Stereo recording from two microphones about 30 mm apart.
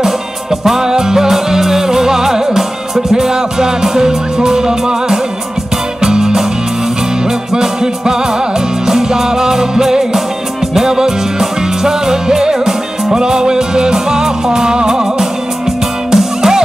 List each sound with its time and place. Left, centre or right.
0.7 s music: centre
7.5 s music: right